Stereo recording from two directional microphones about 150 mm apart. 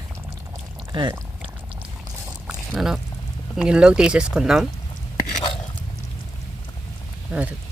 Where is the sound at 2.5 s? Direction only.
5° right (ahead or behind).